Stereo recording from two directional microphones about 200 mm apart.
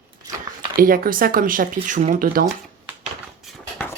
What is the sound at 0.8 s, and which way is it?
Speech, 45° right (ahead or behind).